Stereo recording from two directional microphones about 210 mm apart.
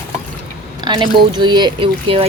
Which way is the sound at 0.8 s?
20° right (ahead or behind).